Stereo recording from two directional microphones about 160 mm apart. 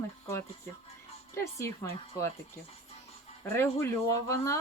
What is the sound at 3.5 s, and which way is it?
Speech, 15° left (ahead or behind).